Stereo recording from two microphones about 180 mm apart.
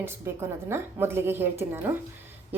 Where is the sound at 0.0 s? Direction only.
15° right (ahead or behind).